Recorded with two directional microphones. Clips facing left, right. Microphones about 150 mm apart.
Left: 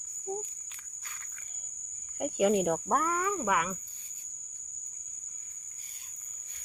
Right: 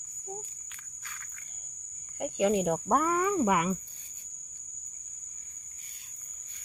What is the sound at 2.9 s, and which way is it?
Speech, 20° right (ahead or behind).